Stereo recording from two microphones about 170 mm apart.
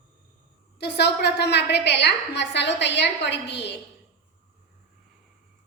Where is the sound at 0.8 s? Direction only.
75° left (ahead or behind).